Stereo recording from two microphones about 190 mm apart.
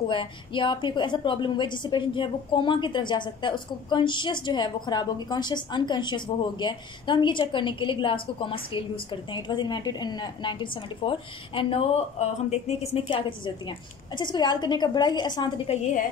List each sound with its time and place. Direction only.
0.1 s a woman's voice: 25° left (ahead or behind)